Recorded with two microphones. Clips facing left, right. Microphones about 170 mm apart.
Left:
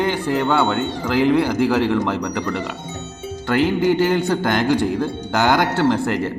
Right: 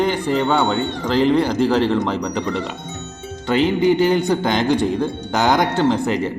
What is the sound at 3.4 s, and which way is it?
Speech, 20° right (ahead or behind).